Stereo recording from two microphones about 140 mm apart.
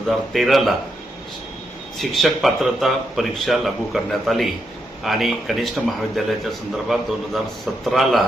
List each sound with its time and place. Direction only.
0.3 s speech: centre (ahead or behind)
2.0 s speech: centre (ahead or behind)